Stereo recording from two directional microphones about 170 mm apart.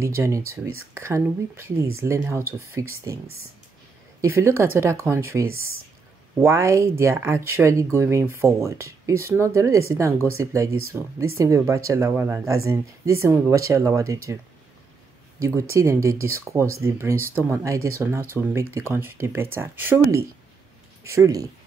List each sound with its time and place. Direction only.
0.0 s speech: 15° right (ahead or behind)
4.2 s speech: 15° right (ahead or behind)